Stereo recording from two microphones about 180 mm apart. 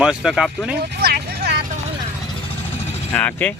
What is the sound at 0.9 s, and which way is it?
Vehicle, 65° right (ahead or behind).